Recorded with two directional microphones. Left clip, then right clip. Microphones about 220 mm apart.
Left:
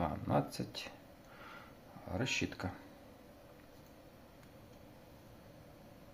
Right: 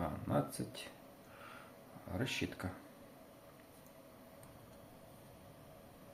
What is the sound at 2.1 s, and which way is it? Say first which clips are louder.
Speech: left 3 dB; 20° left (ahead or behind).